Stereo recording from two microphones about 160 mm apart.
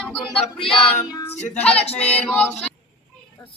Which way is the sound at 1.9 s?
5° left (ahead or behind).